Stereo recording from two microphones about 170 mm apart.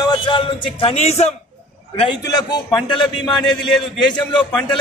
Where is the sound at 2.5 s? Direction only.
25° left (ahead or behind).